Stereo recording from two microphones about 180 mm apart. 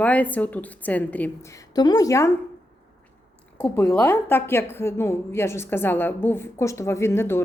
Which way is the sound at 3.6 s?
10° left (ahead or behind).